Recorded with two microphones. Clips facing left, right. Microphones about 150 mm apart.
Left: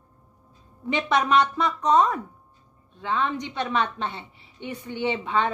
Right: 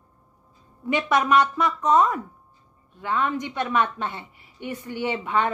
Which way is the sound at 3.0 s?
25° left (ahead or behind).